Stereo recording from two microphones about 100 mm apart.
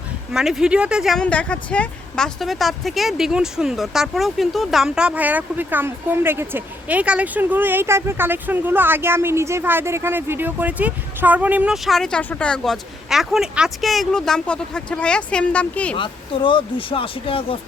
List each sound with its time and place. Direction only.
0.3 s speech: 5° right (ahead or behind)
1.2 s speech: 10° left (ahead or behind); by 11.7 s 15° right (ahead or behind)
11.7 s speech: centre (ahead or behind)
16.0 s speech: 55° left (ahead or behind)